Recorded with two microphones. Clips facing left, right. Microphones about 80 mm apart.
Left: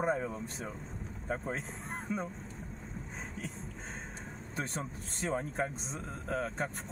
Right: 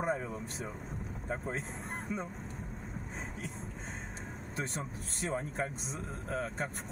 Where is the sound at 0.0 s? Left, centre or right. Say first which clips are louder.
Left 2 dB; centre.